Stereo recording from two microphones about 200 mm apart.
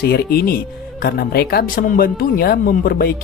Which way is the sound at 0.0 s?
50° left (ahead or behind).